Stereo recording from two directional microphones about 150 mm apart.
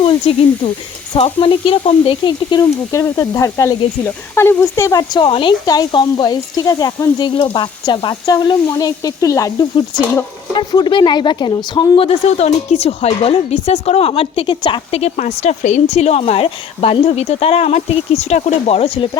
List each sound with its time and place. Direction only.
0.0 s a woman's voice: 35° left (ahead or behind)